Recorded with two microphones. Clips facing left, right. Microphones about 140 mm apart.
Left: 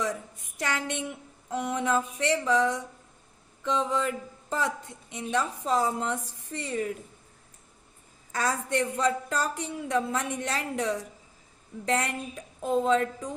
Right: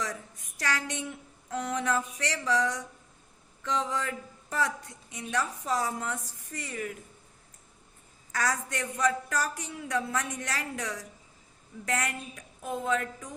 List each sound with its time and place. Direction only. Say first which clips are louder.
0.6 s a woman's voice: left 2 dB; 20° left (ahead or behind)
8.3 s a woman's voice: left 3 dB; 25° left (ahead or behind)